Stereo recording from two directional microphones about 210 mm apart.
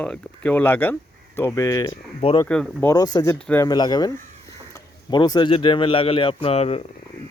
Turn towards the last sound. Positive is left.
turn(degrees=30)  # may be behind; listen again after turning